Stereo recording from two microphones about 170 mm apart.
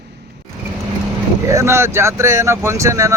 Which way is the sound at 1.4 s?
15° right (ahead or behind).